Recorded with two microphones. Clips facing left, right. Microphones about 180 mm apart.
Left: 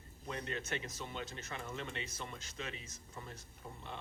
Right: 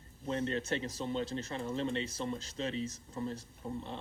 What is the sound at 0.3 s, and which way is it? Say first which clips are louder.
Speech: right 8 dB; 30° right (ahead or behind).